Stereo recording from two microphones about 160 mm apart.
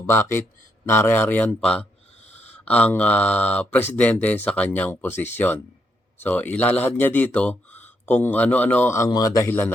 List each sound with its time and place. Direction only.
0.0 s speech: 15° left (ahead or behind)
2.2 s a sound: 45° left (ahead or behind)
2.6 s speech: 10° left (ahead or behind)